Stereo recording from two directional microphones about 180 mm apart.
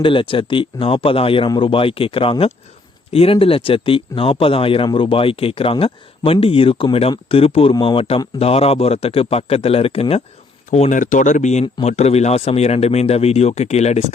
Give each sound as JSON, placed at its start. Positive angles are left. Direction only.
{"t": 0.0, "sound": "speech", "side_deg": 30}